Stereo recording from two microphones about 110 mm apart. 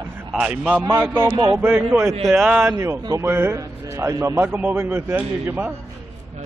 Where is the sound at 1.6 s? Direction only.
15° right (ahead or behind).